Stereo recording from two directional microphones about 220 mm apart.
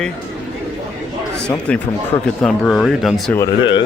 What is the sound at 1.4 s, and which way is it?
Speech, 5° left (ahead or behind).